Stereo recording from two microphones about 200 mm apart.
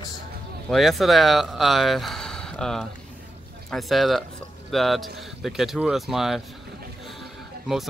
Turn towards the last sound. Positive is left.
turn(degrees=0)  # may be behind; listen again after turning